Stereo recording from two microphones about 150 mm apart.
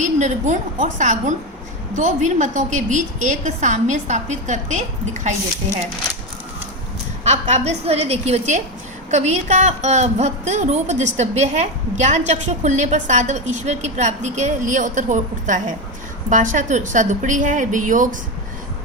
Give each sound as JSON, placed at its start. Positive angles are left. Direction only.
{"t": 0.0, "sound": "a woman's voice", "side_deg": -55}
{"t": 7.3, "sound": "a woman's voice", "side_deg": -50}